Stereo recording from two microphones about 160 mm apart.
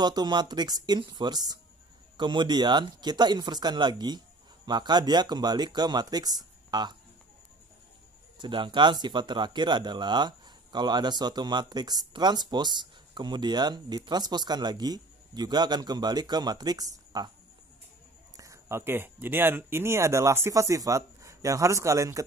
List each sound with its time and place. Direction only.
0.0 s speech: 25° right (ahead or behind)
8.4 s speech: 30° right (ahead or behind)
18.3 s speech: 20° right (ahead or behind)